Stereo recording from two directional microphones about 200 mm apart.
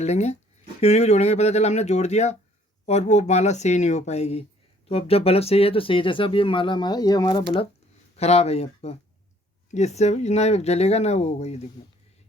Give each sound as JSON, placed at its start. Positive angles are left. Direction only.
{"t": 0.0, "sound": "speech", "side_deg": 35}